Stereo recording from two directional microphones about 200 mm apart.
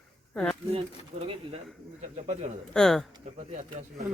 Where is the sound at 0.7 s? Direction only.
30° right (ahead or behind).